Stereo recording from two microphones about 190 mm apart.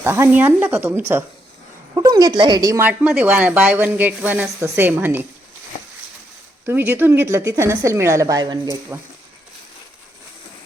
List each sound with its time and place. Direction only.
0.0 s speech: 10° right (ahead or behind)
2.8 s speech: 10° right (ahead or behind)
6.7 s speech: 10° right (ahead or behind)